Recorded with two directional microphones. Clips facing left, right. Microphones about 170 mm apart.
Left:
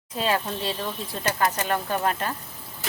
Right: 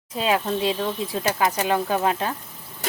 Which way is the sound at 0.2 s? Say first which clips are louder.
Right 4 dB; 10° right (ahead or behind).